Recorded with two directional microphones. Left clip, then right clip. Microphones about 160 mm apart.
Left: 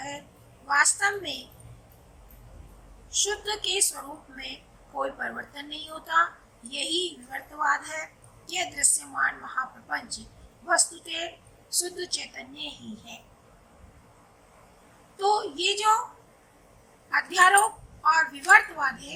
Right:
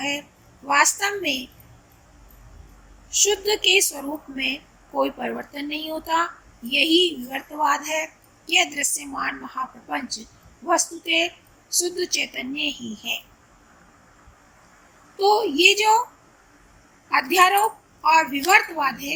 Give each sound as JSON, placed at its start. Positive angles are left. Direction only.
{"t": 0.7, "sound": "a woman's voice", "side_deg": -20}
{"t": 3.1, "sound": "a woman's voice", "side_deg": -20}
{"t": 10.7, "sound": "a woman's voice", "side_deg": -15}
{"t": 15.2, "sound": "a woman's voice", "side_deg": -15}
{"t": 17.1, "sound": "a woman's voice", "side_deg": -15}